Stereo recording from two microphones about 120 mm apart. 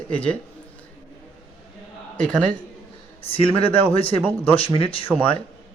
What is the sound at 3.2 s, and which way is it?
Speech, 50° left (ahead or behind).